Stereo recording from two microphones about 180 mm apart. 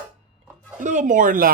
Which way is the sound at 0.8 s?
45° right (ahead or behind).